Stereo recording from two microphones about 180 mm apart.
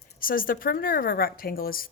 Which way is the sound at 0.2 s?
50° left (ahead or behind).